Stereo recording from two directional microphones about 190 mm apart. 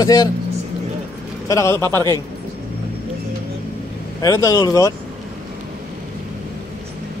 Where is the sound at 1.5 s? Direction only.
15° left (ahead or behind).